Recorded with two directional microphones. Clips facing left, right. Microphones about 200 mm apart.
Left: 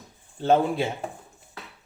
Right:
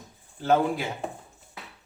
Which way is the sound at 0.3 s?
25° left (ahead or behind).